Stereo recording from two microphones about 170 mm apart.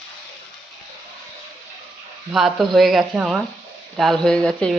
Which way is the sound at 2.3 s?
Centre (ahead or behind).